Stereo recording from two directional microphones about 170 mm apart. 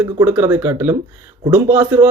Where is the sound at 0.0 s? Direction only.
15° right (ahead or behind).